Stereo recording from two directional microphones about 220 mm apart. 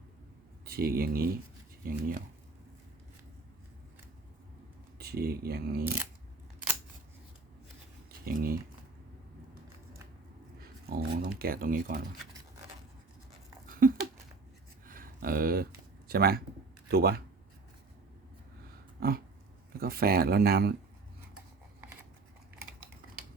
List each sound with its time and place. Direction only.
0.6 s speech: 45° right (ahead or behind)
4.9 s speech: 45° right (ahead or behind)
8.2 s speech: 40° right (ahead or behind)
10.6 s a sound: 40° right (ahead or behind)
11.2 s speech: 45° right (ahead or behind)
13.7 s a sound: 40° right (ahead or behind)
16.0 s speech: 45° right (ahead or behind)
18.9 s dog: 40° right (ahead or behind)
19.8 s speech: 45° right (ahead or behind)